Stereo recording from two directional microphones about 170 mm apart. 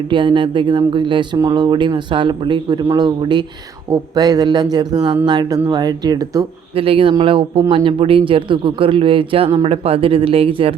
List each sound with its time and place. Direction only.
0.1 s speech: 30° right (ahead or behind)
2.8 s a man's voice: 15° right (ahead or behind)
6.7 s speech: 35° right (ahead or behind)